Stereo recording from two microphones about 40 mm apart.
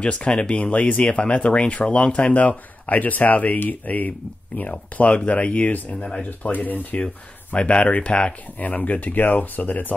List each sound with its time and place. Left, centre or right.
0.0 s speech: left
5.9 s speech: centre
6.4 s speech: left
8.5 s speech: left